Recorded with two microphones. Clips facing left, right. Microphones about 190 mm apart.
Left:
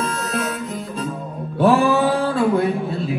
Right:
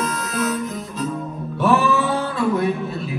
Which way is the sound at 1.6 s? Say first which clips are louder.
Left 3 dB; 30° left (ahead or behind).